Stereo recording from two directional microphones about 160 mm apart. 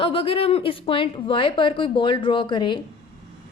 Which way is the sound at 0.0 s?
35° left (ahead or behind).